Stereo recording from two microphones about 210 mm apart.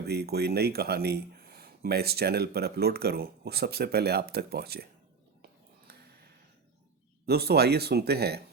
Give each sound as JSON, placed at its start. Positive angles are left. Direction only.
{"t": 0.0, "sound": "speech", "side_deg": -50}
{"t": 5.9, "sound": "a sound", "side_deg": -50}
{"t": 7.3, "sound": "speech", "side_deg": -50}